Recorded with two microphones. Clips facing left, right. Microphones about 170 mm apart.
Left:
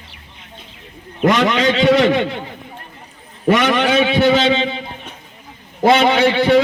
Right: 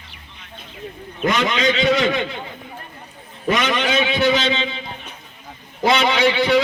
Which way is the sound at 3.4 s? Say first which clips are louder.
Left 5 dB; 60° left (ahead or behind).